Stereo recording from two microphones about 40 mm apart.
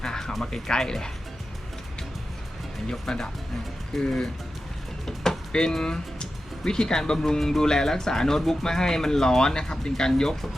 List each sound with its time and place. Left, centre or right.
0.0 s music: centre
0.7 s speech: centre
2.9 s speech: centre
5.0 s a sound: centre
6.7 s speech: centre